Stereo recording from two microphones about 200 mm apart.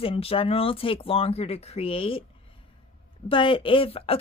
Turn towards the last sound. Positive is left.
turn(degrees=30)  # may be behind; listen again after turning